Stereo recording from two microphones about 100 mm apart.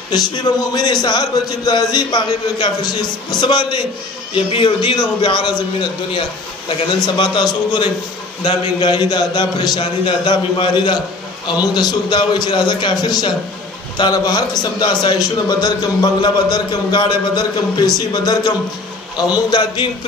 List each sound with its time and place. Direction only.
0.1 s a man's voice: 40° left (ahead or behind)
4.3 s a man's voice: 60° left (ahead or behind)
11.7 s a man's voice: 45° left (ahead or behind)